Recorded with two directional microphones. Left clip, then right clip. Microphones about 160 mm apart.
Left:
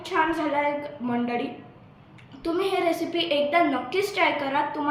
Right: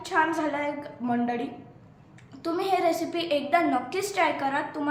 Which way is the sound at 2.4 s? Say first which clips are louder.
Even; 25° right (ahead or behind).